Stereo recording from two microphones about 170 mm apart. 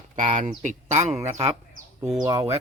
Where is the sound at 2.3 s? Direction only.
20° right (ahead or behind).